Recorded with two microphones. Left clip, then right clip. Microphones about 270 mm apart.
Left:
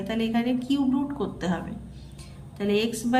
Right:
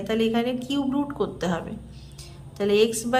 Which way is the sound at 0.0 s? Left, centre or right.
Centre.